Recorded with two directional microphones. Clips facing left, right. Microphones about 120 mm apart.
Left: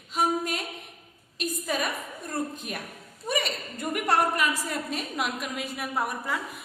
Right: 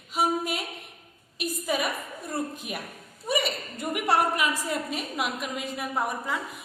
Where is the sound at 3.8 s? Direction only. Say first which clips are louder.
Even; 15° right (ahead or behind).